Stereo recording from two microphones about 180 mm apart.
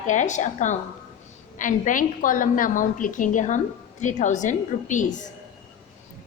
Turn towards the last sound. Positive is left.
turn(degrees=45)  # may be behind; listen again after turning